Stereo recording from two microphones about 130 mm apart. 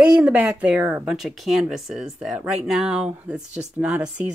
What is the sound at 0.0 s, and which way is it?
Speech, 10° right (ahead or behind).